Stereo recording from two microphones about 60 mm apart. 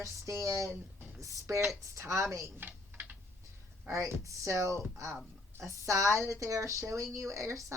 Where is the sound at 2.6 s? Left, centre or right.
Right.